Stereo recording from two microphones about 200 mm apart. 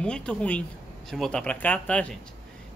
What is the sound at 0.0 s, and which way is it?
A woman's voice, 5° left (ahead or behind).